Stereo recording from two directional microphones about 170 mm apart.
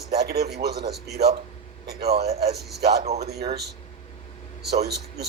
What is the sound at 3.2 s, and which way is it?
Speech, 70° right (ahead or behind).